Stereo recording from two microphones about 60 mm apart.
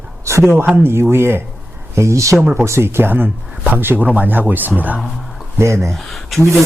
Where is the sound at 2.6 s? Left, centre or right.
Right.